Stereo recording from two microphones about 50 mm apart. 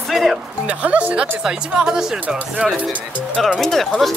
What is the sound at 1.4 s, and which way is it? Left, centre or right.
Speech, centre.